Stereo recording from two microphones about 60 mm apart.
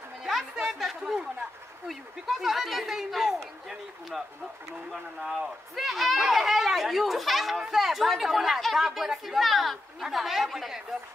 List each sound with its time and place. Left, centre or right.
0.2 s a sound: centre
1.9 s speech: centre
5.2 s speech: centre